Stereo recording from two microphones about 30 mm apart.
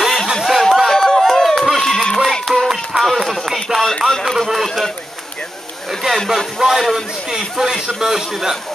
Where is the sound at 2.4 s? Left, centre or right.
Centre.